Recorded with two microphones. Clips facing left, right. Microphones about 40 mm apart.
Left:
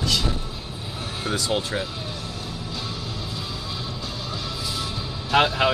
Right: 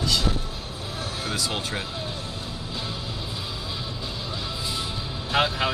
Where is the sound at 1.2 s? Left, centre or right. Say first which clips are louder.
Left 3 dB; left.